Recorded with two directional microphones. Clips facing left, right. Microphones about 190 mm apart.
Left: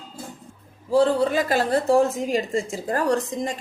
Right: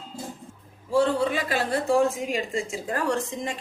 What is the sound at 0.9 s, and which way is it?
A woman's voice, 40° left (ahead or behind).